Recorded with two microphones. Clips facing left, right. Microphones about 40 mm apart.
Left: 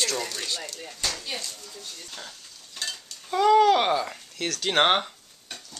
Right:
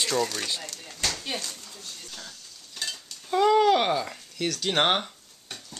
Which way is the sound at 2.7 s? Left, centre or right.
Centre.